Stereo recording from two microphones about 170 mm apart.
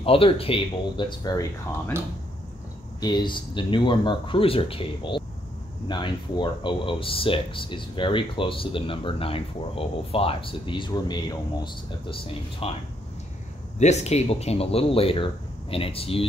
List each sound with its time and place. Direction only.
0.0 s speech: 35° left (ahead or behind)
3.0 s speech: 25° left (ahead or behind)
13.7 s speech: 40° left (ahead or behind)